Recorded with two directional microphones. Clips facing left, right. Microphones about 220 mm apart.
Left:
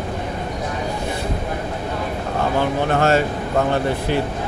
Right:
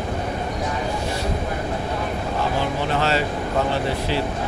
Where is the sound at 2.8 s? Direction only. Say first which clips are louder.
Left 5 dB; 50° left (ahead or behind).